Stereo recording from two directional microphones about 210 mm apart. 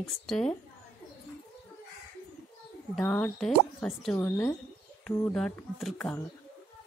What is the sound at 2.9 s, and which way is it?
A woman's voice, 5° left (ahead or behind).